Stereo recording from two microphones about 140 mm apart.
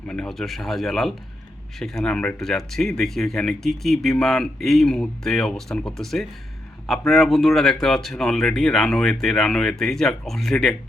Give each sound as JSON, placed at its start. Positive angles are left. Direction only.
{"t": 0.1, "sound": "speech", "side_deg": 5}